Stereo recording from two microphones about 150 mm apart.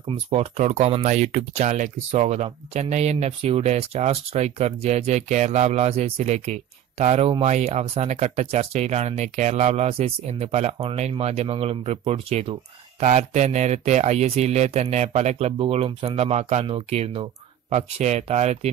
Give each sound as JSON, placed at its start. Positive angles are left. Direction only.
{"t": 0.1, "sound": "speech", "side_deg": -45}